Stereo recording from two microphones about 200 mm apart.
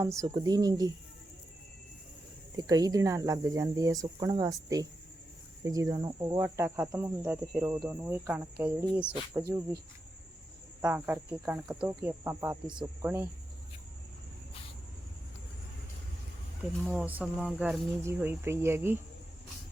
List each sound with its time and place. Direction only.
0.0 s speech: 15° right (ahead or behind)
2.6 s speech: 20° right (ahead or behind)
10.8 s speech: 10° right (ahead or behind)
16.9 s speech: 5° right (ahead or behind)